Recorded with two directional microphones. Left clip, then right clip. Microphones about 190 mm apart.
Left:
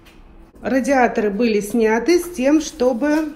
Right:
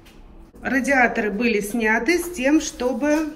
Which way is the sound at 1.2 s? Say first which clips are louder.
Left 3 dB; 30° left (ahead or behind).